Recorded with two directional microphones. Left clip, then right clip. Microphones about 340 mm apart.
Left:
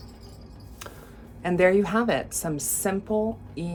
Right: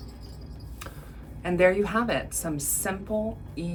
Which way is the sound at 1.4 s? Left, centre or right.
Left.